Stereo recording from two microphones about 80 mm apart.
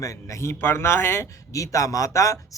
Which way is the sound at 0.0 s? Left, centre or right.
Left.